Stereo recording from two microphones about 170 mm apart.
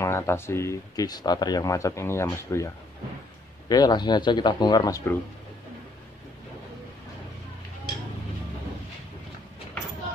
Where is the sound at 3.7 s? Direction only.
25° left (ahead or behind).